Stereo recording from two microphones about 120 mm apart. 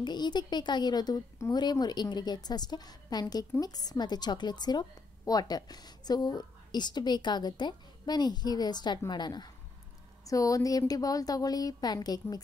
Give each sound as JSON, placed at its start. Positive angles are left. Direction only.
{"t": 0.0, "sound": "a woman's voice", "side_deg": 35}